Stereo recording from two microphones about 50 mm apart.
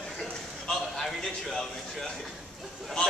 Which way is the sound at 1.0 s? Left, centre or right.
Centre.